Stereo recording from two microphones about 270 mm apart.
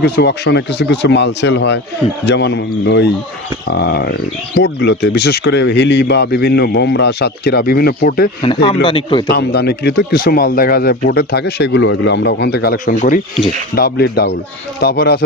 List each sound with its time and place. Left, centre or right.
0.0 s speech: left
8.4 s speech: centre
9.3 s speech: left